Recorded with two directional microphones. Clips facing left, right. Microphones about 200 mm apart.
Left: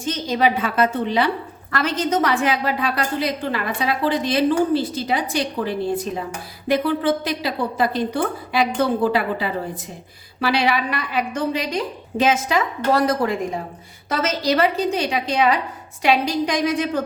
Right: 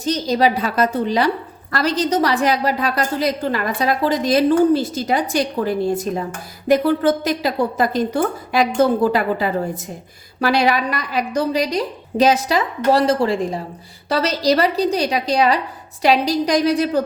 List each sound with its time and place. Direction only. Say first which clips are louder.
0.0 s a woman's voice: right 3 dB; 40° right (ahead or behind)